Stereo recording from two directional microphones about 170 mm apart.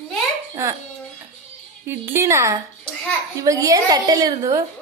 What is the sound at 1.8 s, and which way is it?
A woman's voice, 15° right (ahead or behind).